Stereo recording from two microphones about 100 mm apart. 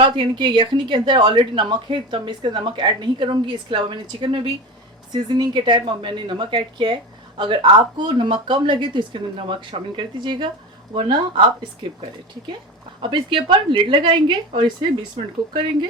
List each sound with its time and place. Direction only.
0.0 s a woman's voice: 55° right (ahead or behind)
13.0 s a woman's voice: 55° right (ahead or behind)